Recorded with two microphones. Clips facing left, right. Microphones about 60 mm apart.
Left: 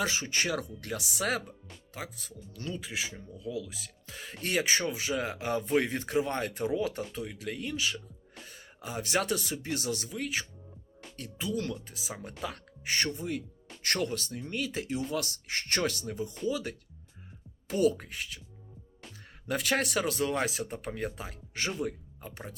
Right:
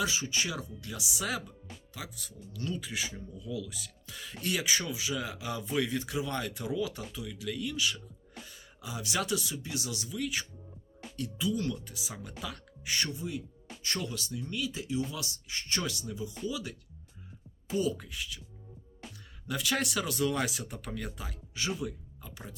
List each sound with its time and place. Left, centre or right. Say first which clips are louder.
0.0 s speech: left 1 dB; left
3.6 s speech: right 2 dB; left
17.7 s speech: left 4 dB; left
19.5 s speech: left 3 dB; left
21.8 s speech: left 4 dB; left